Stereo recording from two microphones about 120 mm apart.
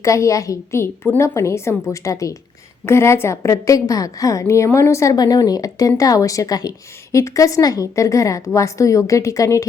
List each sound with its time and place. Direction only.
0.0 s a woman's voice: 25° left (ahead or behind)